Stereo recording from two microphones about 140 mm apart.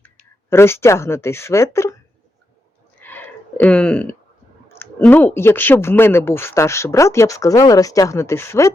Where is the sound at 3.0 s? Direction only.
10° left (ahead or behind).